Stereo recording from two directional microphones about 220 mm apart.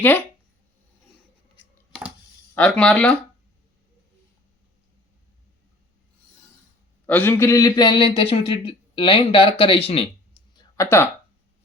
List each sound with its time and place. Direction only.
0.0 s speech: 5° left (ahead or behind)
2.6 s speech: 5° left (ahead or behind)
7.1 s speech: 10° left (ahead or behind)